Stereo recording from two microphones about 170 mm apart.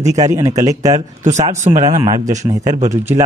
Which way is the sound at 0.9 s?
45° right (ahead or behind).